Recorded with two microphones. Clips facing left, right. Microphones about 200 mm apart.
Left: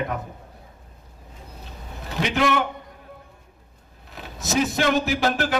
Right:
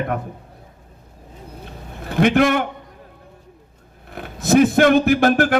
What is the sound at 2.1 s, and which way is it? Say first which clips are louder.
Speech: right 7 dB; 55° right (ahead or behind).